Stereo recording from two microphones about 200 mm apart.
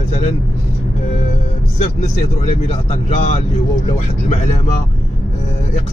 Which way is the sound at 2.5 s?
30° left (ahead or behind).